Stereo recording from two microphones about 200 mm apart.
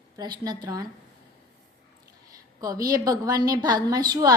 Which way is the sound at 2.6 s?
15° right (ahead or behind).